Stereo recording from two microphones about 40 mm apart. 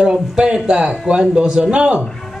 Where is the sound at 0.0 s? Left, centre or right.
Centre.